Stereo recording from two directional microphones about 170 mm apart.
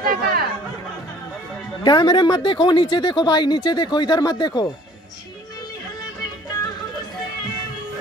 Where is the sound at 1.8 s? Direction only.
25° left (ahead or behind).